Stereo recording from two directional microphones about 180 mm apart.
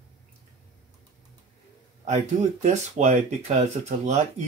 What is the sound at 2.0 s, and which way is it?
Speech, 40° right (ahead or behind).